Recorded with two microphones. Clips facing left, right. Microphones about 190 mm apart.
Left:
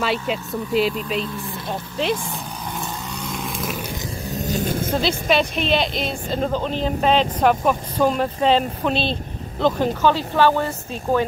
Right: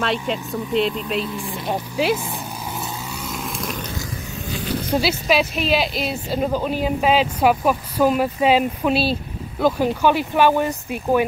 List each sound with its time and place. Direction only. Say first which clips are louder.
0.0 s speech: even; centre (ahead or behind)
1.3 s a woman's voice: right 3 dB; 15° right (ahead or behind)
3.3 s snoring: left 1 dB; centre (ahead or behind)
4.4 s speech: left 3 dB; 45° left (ahead or behind)
4.9 s a woman's voice: right 2 dB; 5° right (ahead or behind)